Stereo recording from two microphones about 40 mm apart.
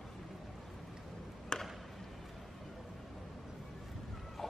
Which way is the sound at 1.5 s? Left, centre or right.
Centre.